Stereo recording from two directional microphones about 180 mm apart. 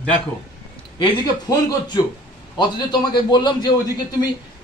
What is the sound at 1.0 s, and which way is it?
A man's voice, 25° left (ahead or behind).